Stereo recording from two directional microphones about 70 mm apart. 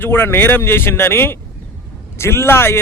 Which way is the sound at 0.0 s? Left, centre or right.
Left.